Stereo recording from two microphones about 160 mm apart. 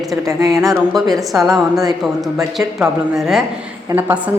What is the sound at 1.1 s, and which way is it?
A woman's voice, centre (ahead or behind).